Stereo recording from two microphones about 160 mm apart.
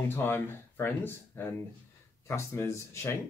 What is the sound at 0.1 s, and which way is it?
Speech, 15° left (ahead or behind).